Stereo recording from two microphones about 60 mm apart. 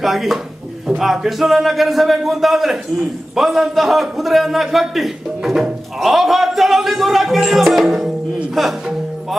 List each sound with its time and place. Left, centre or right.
0.0 s a man's voice: centre